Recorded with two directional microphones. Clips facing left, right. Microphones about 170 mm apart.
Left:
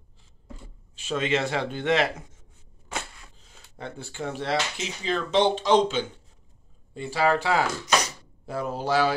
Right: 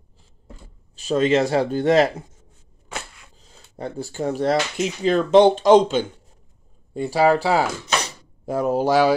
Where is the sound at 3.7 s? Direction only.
40° right (ahead or behind).